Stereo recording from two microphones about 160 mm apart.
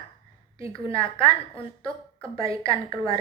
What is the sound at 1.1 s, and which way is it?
A woman's voice, 35° left (ahead or behind).